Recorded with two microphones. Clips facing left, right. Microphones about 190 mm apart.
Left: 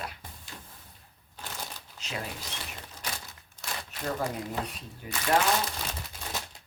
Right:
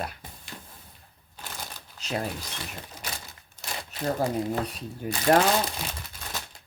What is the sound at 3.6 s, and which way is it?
Speech, 35° right (ahead or behind).